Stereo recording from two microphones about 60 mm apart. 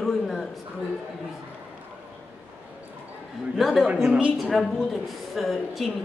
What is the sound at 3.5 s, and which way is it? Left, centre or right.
Speech, centre.